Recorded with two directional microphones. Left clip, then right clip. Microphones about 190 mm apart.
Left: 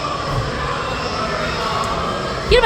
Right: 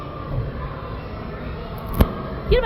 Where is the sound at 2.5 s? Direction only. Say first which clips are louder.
Left 6 dB; 10° left (ahead or behind).